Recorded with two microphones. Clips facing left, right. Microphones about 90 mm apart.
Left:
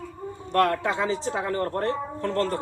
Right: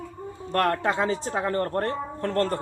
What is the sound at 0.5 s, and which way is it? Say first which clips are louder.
Speech: left 1 dB; 45° right (ahead or behind).